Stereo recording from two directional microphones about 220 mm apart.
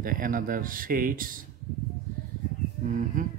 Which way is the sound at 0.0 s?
40° right (ahead or behind).